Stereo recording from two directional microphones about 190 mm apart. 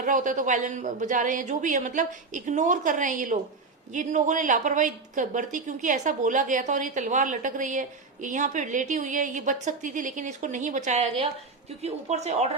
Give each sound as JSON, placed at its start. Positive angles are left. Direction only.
{"t": 0.0, "sound": "a woman's voice", "side_deg": -40}